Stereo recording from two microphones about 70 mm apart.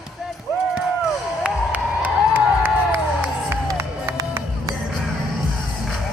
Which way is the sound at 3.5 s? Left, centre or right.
Right.